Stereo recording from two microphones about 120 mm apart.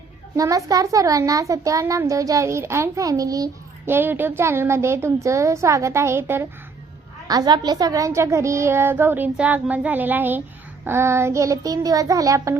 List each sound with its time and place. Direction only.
0.3 s a child's voice: 30° right (ahead or behind)
3.8 s a child's voice: 15° right (ahead or behind)
7.3 s a child's voice: 35° right (ahead or behind)